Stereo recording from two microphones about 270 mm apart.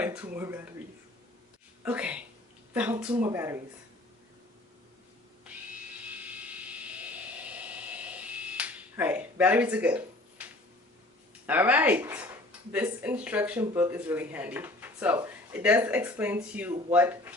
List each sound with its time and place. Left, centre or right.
0.0 s speech: centre
1.8 s speech: centre
6.1 s a sound: centre
11.4 s speech: centre